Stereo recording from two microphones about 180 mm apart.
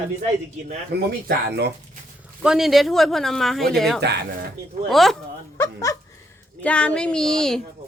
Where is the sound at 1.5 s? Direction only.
70° right (ahead or behind).